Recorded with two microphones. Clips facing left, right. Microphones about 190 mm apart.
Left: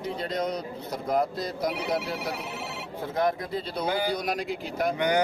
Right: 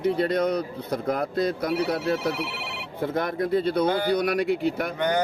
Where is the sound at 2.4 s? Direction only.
75° right (ahead or behind).